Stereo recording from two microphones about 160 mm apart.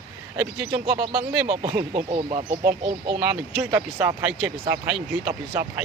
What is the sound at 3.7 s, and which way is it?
Speech, 20° right (ahead or behind).